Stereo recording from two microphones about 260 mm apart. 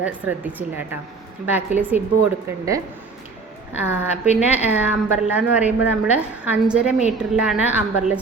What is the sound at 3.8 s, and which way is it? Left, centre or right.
A woman's voice, centre.